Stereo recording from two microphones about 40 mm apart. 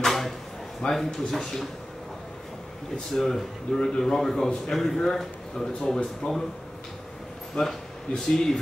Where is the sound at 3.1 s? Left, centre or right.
Centre.